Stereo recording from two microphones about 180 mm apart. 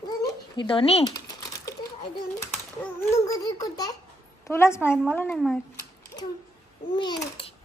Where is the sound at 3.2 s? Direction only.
20° left (ahead or behind).